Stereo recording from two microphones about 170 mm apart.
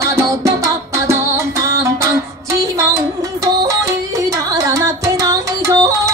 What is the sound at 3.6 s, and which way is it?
Music, 20° right (ahead or behind).